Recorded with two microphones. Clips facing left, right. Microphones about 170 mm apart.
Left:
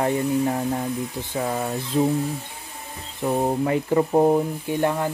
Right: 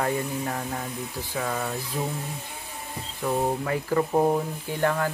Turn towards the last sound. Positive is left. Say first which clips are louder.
# left 3 dB
turn(degrees=20)  # may be behind; listen again after turning